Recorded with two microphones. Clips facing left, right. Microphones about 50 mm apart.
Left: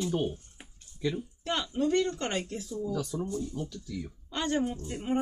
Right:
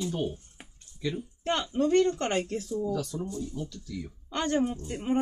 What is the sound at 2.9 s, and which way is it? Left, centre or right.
Speech, centre.